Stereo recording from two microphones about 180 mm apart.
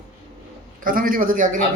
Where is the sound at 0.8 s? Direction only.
50° right (ahead or behind).